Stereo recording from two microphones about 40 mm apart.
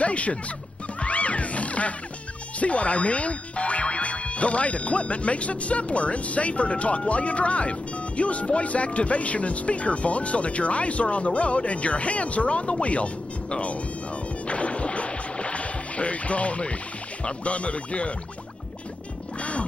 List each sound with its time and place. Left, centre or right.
0.0 s music: left
2.6 s speech: left
14.5 s music: left
17.2 s speech: left